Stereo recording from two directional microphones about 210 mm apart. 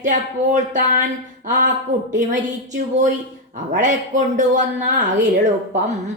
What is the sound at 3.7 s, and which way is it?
A man's voice, 35° right (ahead or behind).